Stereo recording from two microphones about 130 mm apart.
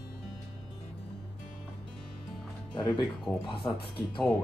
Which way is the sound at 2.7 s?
35° left (ahead or behind).